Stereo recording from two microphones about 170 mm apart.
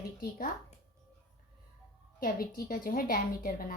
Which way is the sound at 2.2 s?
60° left (ahead or behind).